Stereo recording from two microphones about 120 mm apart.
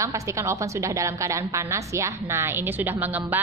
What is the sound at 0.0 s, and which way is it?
A woman's voice, 25° right (ahead or behind).